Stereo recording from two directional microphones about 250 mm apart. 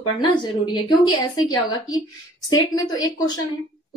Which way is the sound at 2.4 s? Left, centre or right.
Left.